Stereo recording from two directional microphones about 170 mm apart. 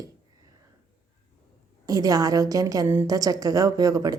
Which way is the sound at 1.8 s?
20° right (ahead or behind).